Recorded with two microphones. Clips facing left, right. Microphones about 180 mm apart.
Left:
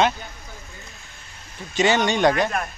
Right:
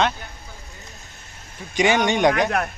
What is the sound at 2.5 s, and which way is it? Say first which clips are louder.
Speech: right 3 dB; 70° right (ahead or behind).